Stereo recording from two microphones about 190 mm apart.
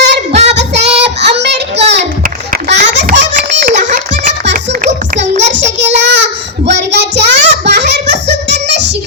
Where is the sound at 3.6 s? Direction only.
40° right (ahead or behind).